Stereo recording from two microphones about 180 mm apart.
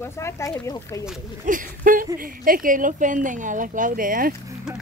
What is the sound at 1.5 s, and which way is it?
Speech, 50° right (ahead or behind).